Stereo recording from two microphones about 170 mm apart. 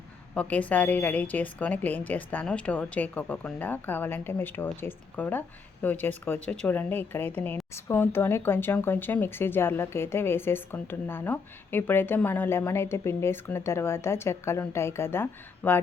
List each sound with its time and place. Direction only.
0.3 s speech: 10° left (ahead or behind)